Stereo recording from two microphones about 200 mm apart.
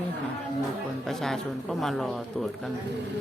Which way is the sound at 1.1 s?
Centre (ahead or behind).